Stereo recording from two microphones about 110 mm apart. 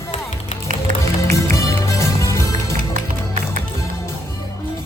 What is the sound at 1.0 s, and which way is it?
Music, 25° left (ahead or behind).